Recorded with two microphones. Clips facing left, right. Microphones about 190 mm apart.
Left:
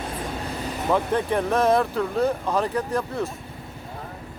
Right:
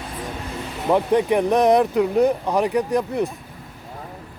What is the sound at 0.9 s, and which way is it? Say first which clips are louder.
Speech: right 5 dB; 15° right (ahead or behind).